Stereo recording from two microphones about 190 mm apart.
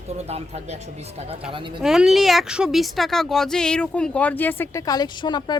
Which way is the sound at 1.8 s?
Centre (ahead or behind).